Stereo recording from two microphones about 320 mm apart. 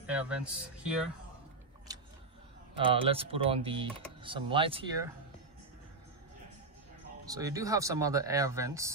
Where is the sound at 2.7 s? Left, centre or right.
Centre.